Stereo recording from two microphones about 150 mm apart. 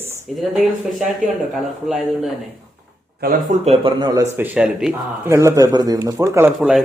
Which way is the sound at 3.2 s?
65° right (ahead or behind).